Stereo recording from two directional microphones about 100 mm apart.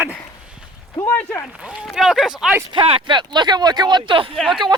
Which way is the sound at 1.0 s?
15° left (ahead or behind).